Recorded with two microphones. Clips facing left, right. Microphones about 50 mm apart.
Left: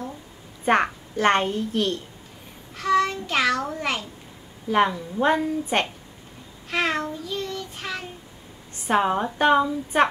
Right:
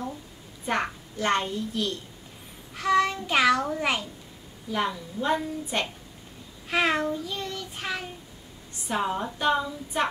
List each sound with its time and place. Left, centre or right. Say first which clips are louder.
0.7 s a child's voice: left 7 dB; left
2.8 s a child's voice: left 2 dB; centre
4.6 s a woman's voice: left 8 dB; left
5.7 s a child's voice: left 5 dB; left
6.7 s child singing: even; centre
8.8 s a woman's voice: left 6 dB; left